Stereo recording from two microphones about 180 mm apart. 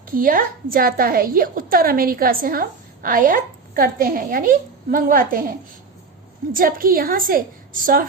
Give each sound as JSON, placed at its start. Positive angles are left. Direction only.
{"t": 0.1, "sound": "a woman's voice", "side_deg": -50}